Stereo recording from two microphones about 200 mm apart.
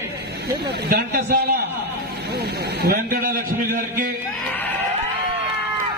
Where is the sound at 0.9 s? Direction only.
50° right (ahead or behind).